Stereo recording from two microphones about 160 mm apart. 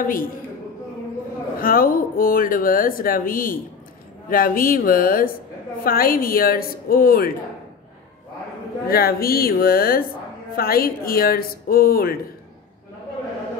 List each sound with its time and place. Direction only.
0.0 s speech: 60° left (ahead or behind)
1.6 s speech: 65° left (ahead or behind)
8.8 s speech: 70° left (ahead or behind)